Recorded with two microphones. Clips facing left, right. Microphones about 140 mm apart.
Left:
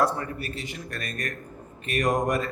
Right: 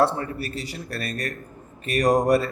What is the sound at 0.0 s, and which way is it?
Speech, 35° right (ahead or behind).